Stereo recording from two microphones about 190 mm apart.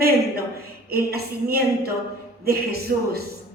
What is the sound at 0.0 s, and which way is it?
A woman's voice, 55° right (ahead or behind).